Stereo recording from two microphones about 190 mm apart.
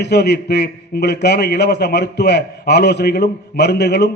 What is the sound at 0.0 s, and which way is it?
A man's voice, 60° left (ahead or behind).